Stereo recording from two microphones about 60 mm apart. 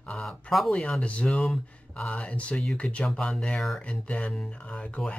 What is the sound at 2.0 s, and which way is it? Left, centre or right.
Speech, left.